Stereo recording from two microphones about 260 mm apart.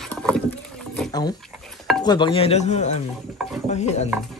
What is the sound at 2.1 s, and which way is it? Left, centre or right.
Speech, centre.